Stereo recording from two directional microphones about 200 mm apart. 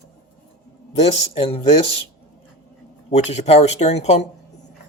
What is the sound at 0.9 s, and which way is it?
Speech, 30° left (ahead or behind).